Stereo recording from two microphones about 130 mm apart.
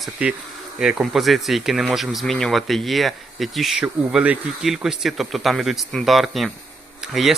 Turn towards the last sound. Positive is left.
turn(degrees=0)  # may be behind; listen again after turning